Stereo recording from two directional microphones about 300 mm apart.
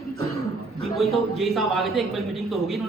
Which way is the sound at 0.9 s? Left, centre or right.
Centre.